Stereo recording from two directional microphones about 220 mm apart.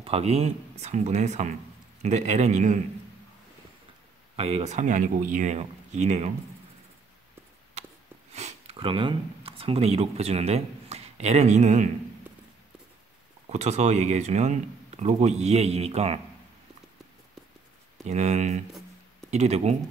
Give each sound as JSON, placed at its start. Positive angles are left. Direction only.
{"t": 0.0, "sound": "speech", "side_deg": -25}
{"t": 4.4, "sound": "speech", "side_deg": -30}
{"t": 7.8, "sound": "a sound", "side_deg": -30}
{"t": 8.3, "sound": "speech", "side_deg": -30}
{"t": 13.5, "sound": "speech", "side_deg": -30}
{"t": 18.0, "sound": "speech", "side_deg": -30}